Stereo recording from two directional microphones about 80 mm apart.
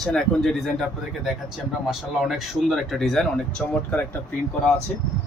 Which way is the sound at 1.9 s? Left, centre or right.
Centre.